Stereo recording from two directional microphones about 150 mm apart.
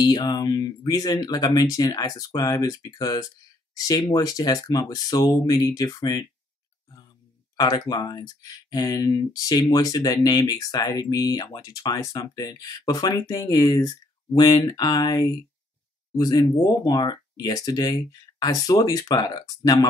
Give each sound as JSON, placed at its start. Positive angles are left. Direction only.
{"t": 0.0, "sound": "speech", "side_deg": 30}
{"t": 7.5, "sound": "speech", "side_deg": 25}